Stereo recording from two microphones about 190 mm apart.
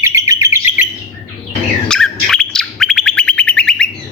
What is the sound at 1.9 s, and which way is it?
Bird, 5° left (ahead or behind).